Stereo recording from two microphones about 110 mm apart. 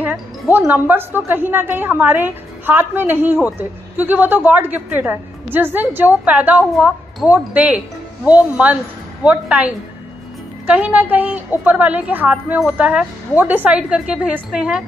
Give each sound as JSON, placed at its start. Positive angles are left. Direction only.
{"t": 0.5, "sound": "a woman's voice", "side_deg": -15}
{"t": 10.7, "sound": "a woman's voice", "side_deg": -15}